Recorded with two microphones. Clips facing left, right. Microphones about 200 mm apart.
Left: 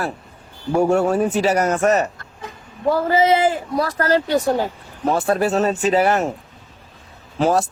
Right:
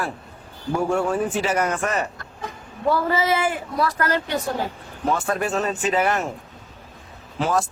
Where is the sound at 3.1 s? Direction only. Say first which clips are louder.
Left 6 dB; 20° left (ahead or behind).